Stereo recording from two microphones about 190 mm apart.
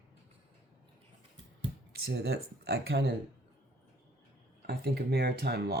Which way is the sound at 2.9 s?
55° right (ahead or behind).